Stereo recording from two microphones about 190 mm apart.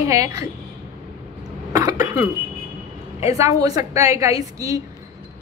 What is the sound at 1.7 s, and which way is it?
Cough, 20° right (ahead or behind).